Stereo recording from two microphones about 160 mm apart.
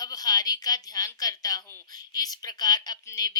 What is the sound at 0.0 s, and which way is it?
A woman's voice, 25° left (ahead or behind).